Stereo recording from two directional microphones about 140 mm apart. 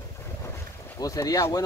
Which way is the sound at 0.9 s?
25° left (ahead or behind).